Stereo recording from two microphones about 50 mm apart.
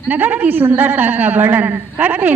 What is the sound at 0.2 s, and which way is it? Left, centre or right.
A man's voice, right.